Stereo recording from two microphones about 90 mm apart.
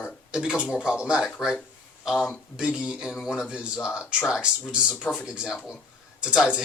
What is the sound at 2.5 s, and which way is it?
Speech, 10° right (ahead or behind).